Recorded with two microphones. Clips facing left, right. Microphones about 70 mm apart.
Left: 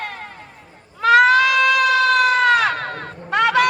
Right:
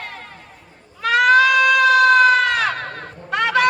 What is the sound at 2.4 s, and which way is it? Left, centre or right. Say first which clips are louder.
Crowd: left 4 dB; left.